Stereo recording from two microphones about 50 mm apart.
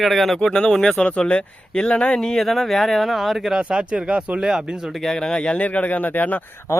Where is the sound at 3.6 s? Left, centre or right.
Right.